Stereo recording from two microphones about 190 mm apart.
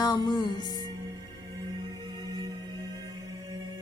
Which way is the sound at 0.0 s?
20° left (ahead or behind).